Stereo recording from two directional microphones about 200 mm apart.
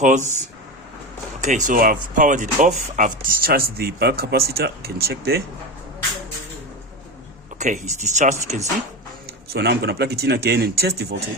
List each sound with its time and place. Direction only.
0.0 s speech: 35° right (ahead or behind)
7.6 s speech: 35° right (ahead or behind)
9.2 s speech: 55° right (ahead or behind)